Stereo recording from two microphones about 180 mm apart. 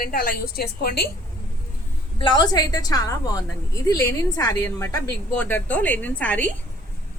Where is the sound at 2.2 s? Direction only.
25° left (ahead or behind); by 6.6 s 10° left (ahead or behind).